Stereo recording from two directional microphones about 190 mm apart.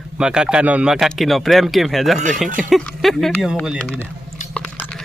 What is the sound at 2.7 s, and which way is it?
Speech, centre (ahead or behind).